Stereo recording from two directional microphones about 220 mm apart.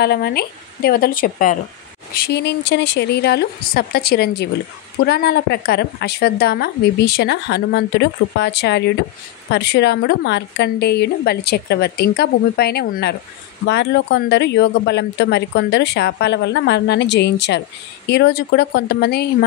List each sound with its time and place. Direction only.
0.0 s a woman's voice: 45° left (ahead or behind)